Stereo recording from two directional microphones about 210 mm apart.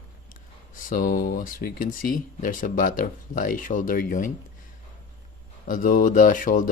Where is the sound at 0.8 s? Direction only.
40° left (ahead or behind).